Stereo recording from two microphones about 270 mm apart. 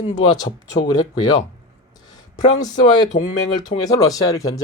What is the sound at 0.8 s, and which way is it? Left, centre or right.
Speech, centre.